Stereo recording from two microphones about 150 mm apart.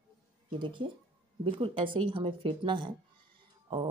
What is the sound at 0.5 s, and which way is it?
Speech, 35° right (ahead or behind).